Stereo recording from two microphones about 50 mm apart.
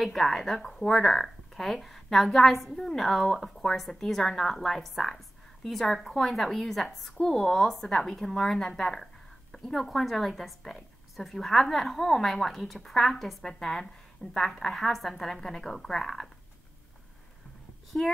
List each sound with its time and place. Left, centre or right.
0.0 s a woman's voice: centre
17.9 s speech: left